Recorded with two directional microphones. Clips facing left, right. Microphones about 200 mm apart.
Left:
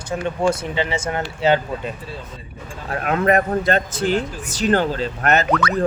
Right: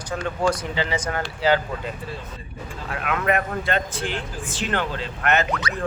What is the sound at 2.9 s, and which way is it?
Speech, 40° left (ahead or behind).